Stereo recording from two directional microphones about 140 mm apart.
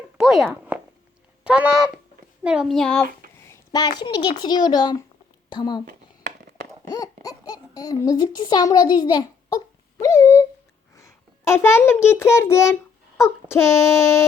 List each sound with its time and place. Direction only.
0.2 s a child's voice: 5° right (ahead or behind)
3.7 s a child's voice: 30° left (ahead or behind)
6.9 s a child's voice: 25° left (ahead or behind)
10.0 s a sound: 25° left (ahead or behind)
10.9 s a child's voice: 20° left (ahead or behind)
13.2 s child singing: 20° left (ahead or behind)